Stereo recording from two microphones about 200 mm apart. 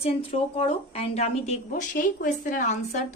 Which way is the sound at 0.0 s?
30° left (ahead or behind).